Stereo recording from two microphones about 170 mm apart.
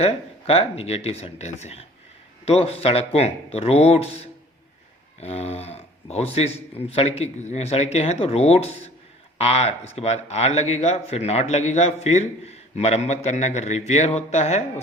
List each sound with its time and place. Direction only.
0.0 s speech: 35° left (ahead or behind)